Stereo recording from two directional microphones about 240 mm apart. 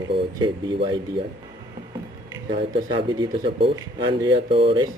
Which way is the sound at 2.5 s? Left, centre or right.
Centre.